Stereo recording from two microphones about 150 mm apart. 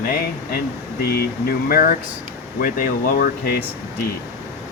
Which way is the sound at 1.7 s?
75° left (ahead or behind).